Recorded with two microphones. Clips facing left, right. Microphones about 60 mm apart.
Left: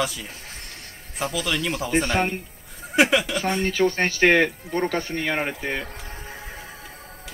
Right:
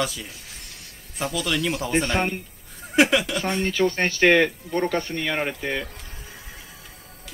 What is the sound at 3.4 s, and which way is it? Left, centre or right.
Speech, centre.